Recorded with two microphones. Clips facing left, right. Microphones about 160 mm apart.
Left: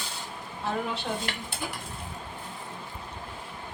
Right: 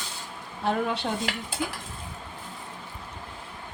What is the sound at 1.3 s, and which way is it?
Dishes, 90° right.